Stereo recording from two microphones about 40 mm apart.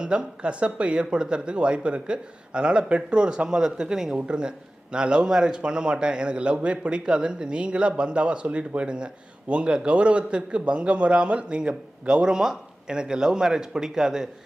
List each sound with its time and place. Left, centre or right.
0.0 s a man's voice: right